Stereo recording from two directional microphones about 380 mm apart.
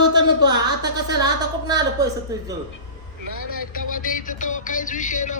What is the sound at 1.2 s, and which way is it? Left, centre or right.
A woman's voice, centre.